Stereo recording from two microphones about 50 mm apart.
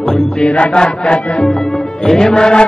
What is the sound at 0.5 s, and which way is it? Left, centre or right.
Music, left.